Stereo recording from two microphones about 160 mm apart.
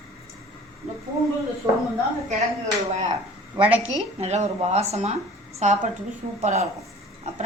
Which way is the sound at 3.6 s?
10° right (ahead or behind).